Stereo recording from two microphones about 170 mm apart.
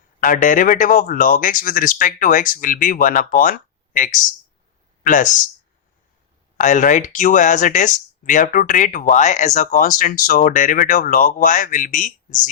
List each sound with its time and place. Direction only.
0.2 s speech: 50° left (ahead or behind)
6.6 s speech: 50° left (ahead or behind)